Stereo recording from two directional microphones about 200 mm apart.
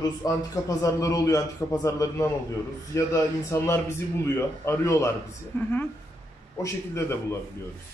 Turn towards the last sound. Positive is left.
turn(degrees=15)  # may be behind; listen again after turning